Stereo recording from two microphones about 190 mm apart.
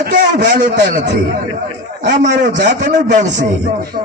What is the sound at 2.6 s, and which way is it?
Speech, 40° right (ahead or behind).